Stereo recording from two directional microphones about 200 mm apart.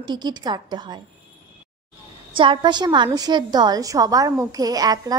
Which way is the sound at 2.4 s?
25° right (ahead or behind).